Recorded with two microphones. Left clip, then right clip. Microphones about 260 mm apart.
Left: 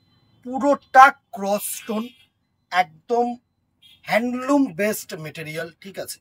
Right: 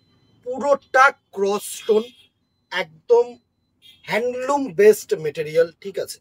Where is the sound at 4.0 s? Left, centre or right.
Centre.